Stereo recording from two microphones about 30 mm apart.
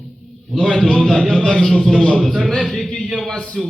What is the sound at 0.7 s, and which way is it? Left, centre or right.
A man's voice, centre.